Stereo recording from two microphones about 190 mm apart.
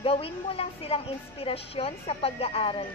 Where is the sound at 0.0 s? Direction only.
30° left (ahead or behind).